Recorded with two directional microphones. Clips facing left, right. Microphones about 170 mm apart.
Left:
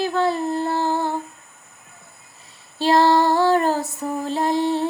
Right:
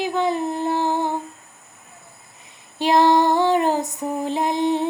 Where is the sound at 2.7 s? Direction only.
15° right (ahead or behind).